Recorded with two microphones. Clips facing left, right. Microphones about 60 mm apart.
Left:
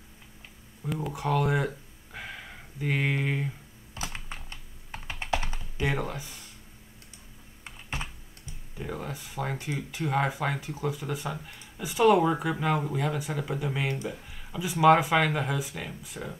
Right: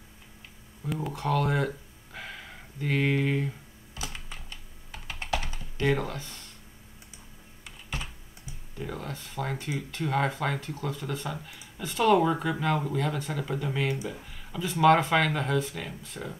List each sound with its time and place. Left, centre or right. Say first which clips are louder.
0.8 s speech: even; centre
2.1 s a sound: left 1 dB; centre
3.9 s computer keyboard: left 2 dB; left
5.8 s speech: right 3 dB; centre
7.6 s computer keyboard: left 1 dB; left
8.7 s speech: left 1 dB; centre